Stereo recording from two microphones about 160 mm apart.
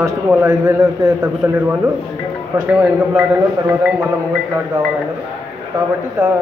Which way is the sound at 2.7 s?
10° right (ahead or behind).